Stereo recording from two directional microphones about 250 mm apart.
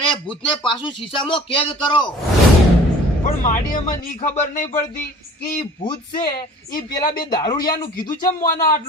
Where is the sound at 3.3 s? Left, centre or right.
Left.